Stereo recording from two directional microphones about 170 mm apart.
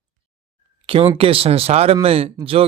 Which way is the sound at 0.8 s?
30° right (ahead or behind).